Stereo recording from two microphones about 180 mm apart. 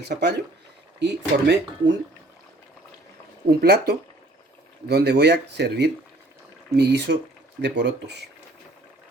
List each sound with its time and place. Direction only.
0.0 s speech: 65° right (ahead or behind)
3.6 s speech: 60° right (ahead or behind)